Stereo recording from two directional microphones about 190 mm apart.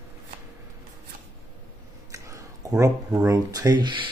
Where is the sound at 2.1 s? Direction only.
15° right (ahead or behind).